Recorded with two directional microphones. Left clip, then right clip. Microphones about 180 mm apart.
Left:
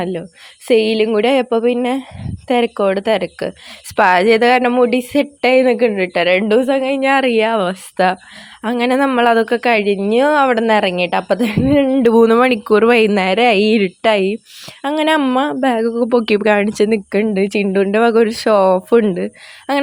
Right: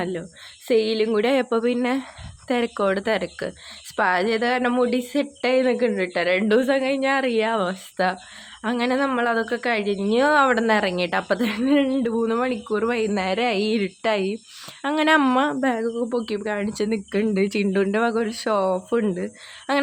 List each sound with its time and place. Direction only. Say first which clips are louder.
0.0 s speech: left 6 dB; 30° left (ahead or behind)
6.5 s speech: left 6 dB; 25° left (ahead or behind)
7.1 s speech: left 10 dB; 35° left (ahead or behind)
12.0 s speech: left 13 dB; 50° left (ahead or behind)
14.8 s speech: left 4 dB; 25° left (ahead or behind)
15.4 s speech: left 7 dB; 30° left (ahead or behind)